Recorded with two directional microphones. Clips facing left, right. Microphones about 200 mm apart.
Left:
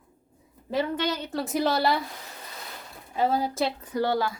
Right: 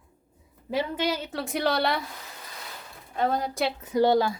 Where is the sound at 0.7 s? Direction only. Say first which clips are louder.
Even; 10° right (ahead or behind).